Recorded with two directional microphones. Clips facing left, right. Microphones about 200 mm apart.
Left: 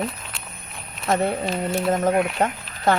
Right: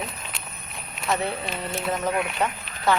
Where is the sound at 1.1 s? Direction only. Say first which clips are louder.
Left 5 dB; 45° left (ahead or behind).